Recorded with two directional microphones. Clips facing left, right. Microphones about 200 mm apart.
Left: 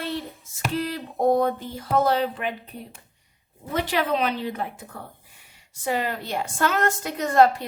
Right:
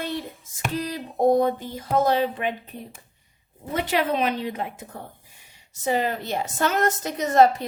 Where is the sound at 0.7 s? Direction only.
15° right (ahead or behind).